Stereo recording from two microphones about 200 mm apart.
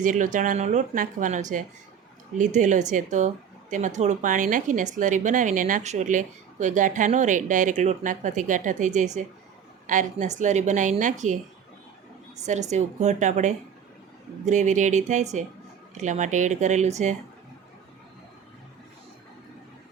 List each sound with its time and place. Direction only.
0.0 s speech: 40° right (ahead or behind)
12.7 s speech: 35° right (ahead or behind)